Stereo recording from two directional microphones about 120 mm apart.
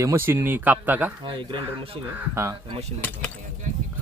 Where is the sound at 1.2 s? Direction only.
45° right (ahead or behind).